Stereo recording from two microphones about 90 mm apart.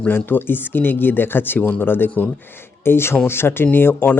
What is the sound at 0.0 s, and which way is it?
Speech, 25° left (ahead or behind).